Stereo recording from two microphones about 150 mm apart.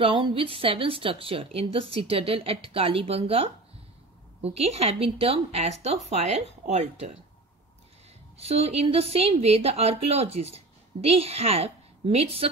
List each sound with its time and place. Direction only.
0.0 s a woman's voice: 35° right (ahead or behind)
8.4 s a woman's voice: 45° right (ahead or behind)